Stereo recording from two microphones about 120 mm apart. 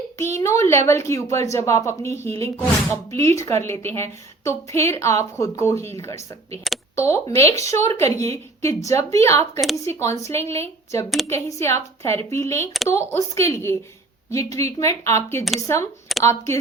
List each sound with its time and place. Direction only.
0.3 s a woman's voice: 25° left (ahead or behind)